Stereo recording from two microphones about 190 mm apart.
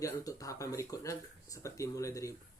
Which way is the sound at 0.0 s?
15° left (ahead or behind).